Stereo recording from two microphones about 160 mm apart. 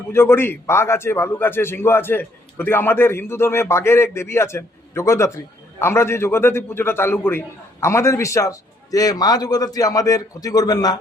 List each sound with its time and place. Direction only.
0.1 s a man's voice: 15° left (ahead or behind)